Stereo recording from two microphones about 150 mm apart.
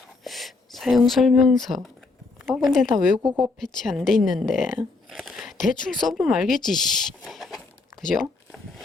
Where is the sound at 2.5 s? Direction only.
Centre (ahead or behind).